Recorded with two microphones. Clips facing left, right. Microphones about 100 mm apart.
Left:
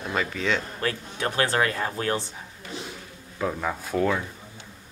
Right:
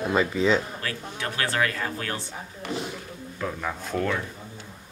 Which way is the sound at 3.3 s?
10° left (ahead or behind).